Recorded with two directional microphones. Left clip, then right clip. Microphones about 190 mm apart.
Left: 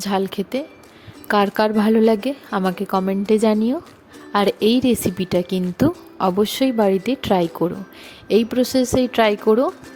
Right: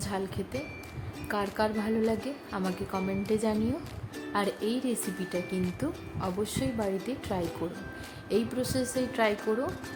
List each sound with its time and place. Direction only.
0.0 s a woman's voice: 50° left (ahead or behind)